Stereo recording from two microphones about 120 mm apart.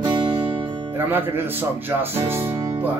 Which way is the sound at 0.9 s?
15° right (ahead or behind).